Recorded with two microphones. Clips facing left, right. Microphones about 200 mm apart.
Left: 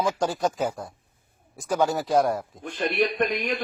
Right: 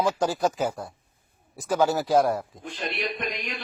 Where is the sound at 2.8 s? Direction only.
55° left (ahead or behind).